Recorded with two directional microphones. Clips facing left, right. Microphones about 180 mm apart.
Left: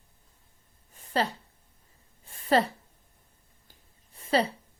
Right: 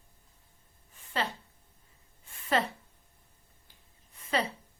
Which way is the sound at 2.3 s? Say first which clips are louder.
Left 5 dB; 35° left (ahead or behind).